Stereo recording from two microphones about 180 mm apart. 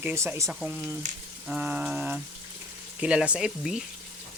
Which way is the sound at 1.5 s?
5° right (ahead or behind).